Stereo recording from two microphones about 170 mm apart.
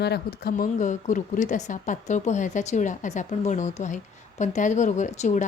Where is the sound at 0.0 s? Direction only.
70° left (ahead or behind).